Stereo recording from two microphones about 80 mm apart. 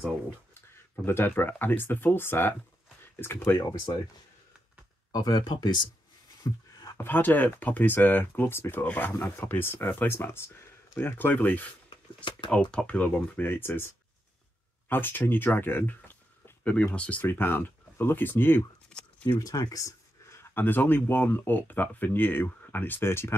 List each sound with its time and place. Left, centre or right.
0.6 s speech: left
5.1 s speech: left
6.4 s a sound: left
7.0 s speech: left
14.9 s speech: left
18.9 s a sound: centre
19.4 s speech: left